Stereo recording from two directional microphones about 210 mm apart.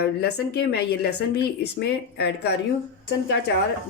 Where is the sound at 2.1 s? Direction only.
55° left (ahead or behind).